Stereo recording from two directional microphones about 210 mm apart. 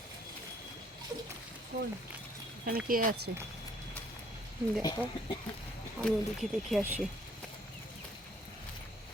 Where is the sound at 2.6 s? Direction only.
40° right (ahead or behind).